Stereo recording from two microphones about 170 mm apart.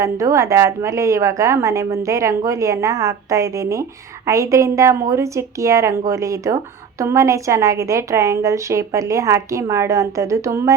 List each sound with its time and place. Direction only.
0.0 s a woman's voice: 15° right (ahead or behind)